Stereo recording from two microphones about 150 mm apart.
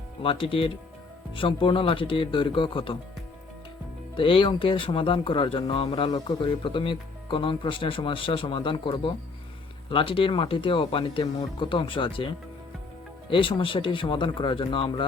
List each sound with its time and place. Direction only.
0.2 s speech: 35° left (ahead or behind)
4.1 s speech: 35° left (ahead or behind)
13.3 s speech: 35° left (ahead or behind)